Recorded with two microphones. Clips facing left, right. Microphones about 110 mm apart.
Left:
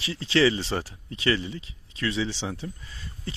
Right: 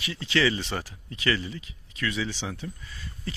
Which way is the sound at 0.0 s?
30° left (ahead or behind).